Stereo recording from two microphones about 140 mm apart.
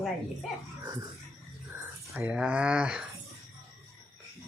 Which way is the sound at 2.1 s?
10° right (ahead or behind).